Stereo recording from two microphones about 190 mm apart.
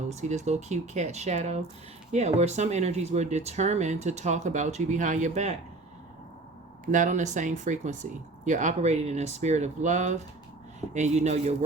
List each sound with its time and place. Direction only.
0.1 s speech: 35° right (ahead or behind)
6.8 s speech: 40° right (ahead or behind)